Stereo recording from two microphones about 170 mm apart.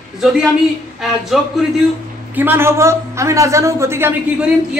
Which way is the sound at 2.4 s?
15° right (ahead or behind).